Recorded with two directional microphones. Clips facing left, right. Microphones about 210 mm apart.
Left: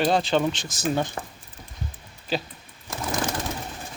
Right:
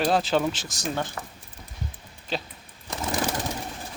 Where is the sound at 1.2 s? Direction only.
30° left (ahead or behind).